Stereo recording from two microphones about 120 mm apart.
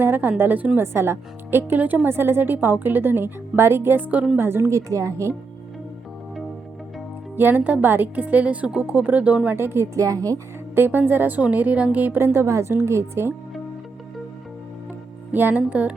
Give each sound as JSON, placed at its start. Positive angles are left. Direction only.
{"t": 0.0, "sound": "a woman's voice", "side_deg": -15}
{"t": 4.4, "sound": "a woman's voice", "side_deg": -20}
{"t": 7.3, "sound": "a woman's voice", "side_deg": -15}
{"t": 10.8, "sound": "a woman's voice", "side_deg": -15}
{"t": 15.3, "sound": "a woman's voice", "side_deg": -15}